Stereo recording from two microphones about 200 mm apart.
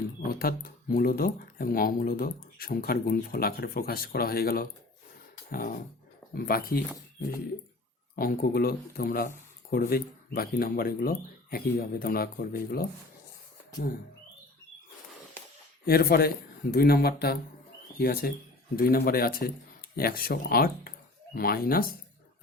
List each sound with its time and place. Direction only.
0.2 s speech: 50° left (ahead or behind)
5.5 s dog: 45° left (ahead or behind)
6.3 s speech: 50° left (ahead or behind)
8.1 s speech: 50° left (ahead or behind)
15.9 s speech: 50° left (ahead or behind)